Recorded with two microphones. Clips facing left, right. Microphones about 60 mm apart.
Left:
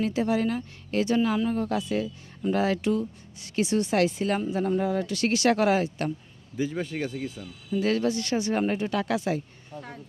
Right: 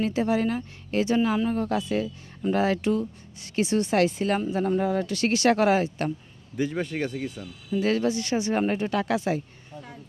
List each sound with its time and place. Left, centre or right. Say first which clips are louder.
0.0 s speech: right 1 dB; right
1.5 s speech: right 1 dB; right
6.6 s speech: right 2 dB; right
7.7 s speech: right 1 dB; right
8.6 s speech: right 1 dB; right
9.7 s speech: left 2 dB; left